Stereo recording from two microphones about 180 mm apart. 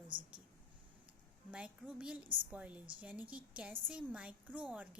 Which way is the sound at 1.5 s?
5° right (ahead or behind).